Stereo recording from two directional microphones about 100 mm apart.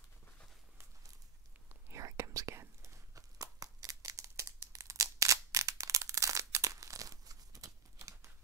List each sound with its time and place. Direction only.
1.9 s whispering: 30° right (ahead or behind)